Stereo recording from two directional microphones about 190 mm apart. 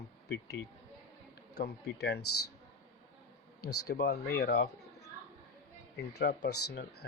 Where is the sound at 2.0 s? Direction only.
60° left (ahead or behind).